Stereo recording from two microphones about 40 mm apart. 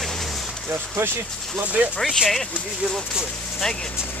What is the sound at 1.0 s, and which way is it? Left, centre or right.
Speech, right.